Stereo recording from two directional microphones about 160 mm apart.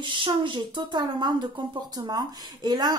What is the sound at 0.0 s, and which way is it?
Speech, 30° right (ahead or behind).